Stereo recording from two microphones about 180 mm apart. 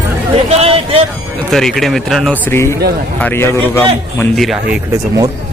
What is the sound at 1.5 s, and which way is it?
A man's voice, centre (ahead or behind).